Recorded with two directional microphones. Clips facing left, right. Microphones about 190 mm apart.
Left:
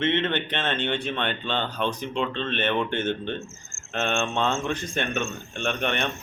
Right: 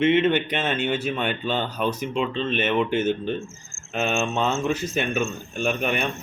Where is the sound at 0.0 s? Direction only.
10° right (ahead or behind).